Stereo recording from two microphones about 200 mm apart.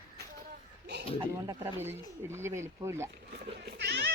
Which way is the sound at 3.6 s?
55° right (ahead or behind).